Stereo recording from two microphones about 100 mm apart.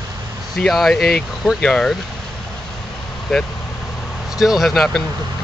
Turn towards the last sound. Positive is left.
turn(degrees=0)  # may be behind; listen again after turning